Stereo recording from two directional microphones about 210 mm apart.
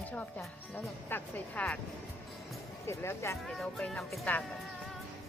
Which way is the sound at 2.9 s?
15° left (ahead or behind).